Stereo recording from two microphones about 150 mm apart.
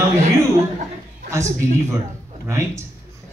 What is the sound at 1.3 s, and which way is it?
Speech, 20° right (ahead or behind).